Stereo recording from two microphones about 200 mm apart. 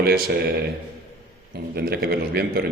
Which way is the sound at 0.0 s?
50° right (ahead or behind).